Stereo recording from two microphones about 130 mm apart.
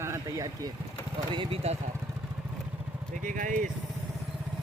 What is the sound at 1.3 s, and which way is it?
Speech, 45° right (ahead or behind).